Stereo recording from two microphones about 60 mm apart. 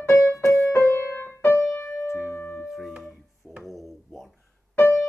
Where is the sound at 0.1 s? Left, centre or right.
Left.